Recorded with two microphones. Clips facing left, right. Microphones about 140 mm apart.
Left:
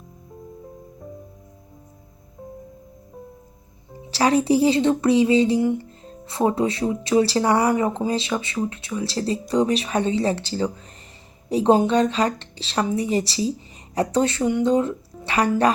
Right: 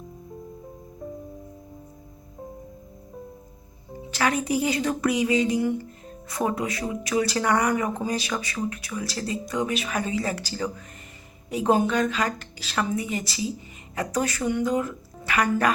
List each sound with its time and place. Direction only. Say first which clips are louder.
4.1 s a woman's voice: left 6 dB; 30° left (ahead or behind)